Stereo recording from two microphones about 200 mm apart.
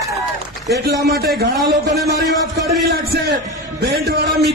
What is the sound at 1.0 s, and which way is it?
Speech, 50° right (ahead or behind).